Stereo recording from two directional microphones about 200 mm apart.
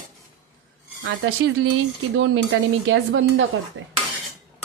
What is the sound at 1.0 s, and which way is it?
Speech, 70° right (ahead or behind).